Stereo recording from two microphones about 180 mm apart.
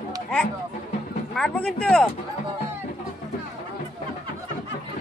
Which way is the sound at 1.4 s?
5° left (ahead or behind).